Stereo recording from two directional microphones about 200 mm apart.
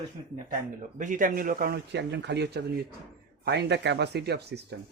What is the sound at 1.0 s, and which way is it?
Speech, 40° right (ahead or behind).